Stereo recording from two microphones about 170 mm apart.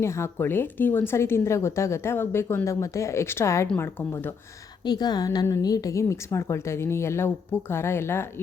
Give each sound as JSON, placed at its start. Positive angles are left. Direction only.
{"t": 0.0, "sound": "speech", "side_deg": 15}
{"t": 4.8, "sound": "speech", "side_deg": 25}